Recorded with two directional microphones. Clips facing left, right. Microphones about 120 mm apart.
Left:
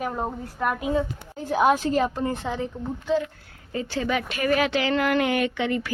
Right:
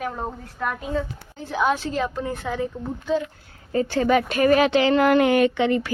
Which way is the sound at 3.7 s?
45° right (ahead or behind).